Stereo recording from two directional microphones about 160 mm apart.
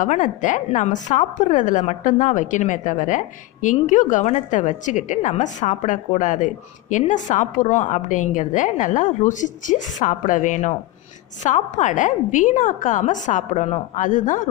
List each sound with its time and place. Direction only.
0.0 s a woman's voice: 50° left (ahead or behind)